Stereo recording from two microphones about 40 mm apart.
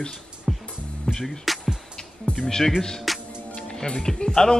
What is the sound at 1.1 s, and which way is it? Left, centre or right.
Music, left.